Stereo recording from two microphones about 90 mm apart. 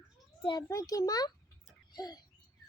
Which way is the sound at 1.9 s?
50° left (ahead or behind).